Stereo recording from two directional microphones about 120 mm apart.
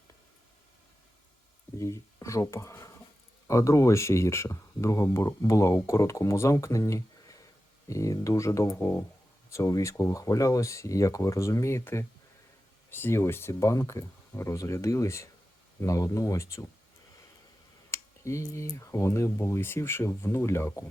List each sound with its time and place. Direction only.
1.8 s speech: 25° left (ahead or behind)
17.9 s a sound: 25° left (ahead or behind)
18.7 s speech: 25° left (ahead or behind)